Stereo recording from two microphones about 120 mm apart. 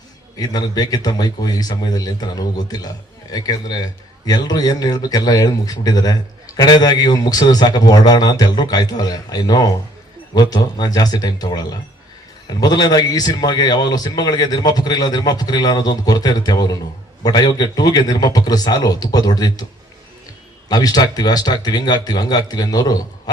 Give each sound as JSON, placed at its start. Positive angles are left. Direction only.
{"t": 0.3, "sound": "a man's voice", "side_deg": 35}
{"t": 20.7, "sound": "a man's voice", "side_deg": 35}